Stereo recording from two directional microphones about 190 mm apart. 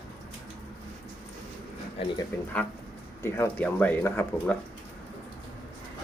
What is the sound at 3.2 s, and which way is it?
Speech, 15° left (ahead or behind).